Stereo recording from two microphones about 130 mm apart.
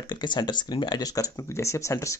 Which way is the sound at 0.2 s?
35° left (ahead or behind).